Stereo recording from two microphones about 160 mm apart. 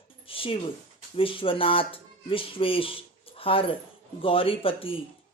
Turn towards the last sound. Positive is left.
turn(degrees=35)  # may be behind; listen again after turning